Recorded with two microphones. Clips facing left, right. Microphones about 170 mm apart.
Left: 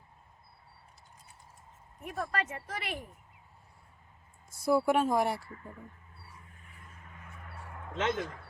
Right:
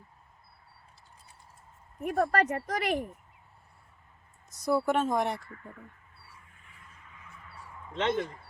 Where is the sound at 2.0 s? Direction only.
55° right (ahead or behind).